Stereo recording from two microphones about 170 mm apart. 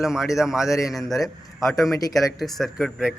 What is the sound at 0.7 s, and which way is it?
Speech, 20° left (ahead or behind).